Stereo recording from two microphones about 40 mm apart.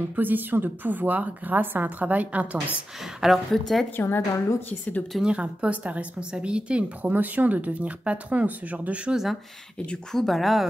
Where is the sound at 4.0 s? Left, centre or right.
Left.